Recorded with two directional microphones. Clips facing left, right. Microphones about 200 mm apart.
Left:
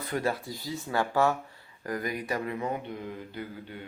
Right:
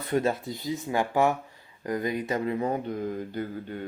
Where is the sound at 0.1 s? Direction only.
20° right (ahead or behind).